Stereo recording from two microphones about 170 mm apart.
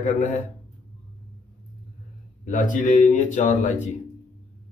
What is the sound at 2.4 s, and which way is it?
Speech, 50° left (ahead or behind).